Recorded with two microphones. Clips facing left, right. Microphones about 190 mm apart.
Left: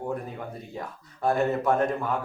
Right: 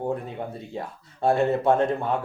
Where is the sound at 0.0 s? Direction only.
30° right (ahead or behind).